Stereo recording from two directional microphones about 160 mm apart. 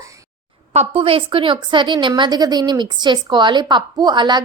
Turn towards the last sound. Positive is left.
turn(degrees=-30)  # may be behind; listen again after turning